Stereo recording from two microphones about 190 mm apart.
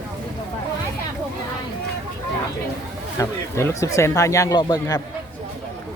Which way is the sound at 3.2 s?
15° left (ahead or behind).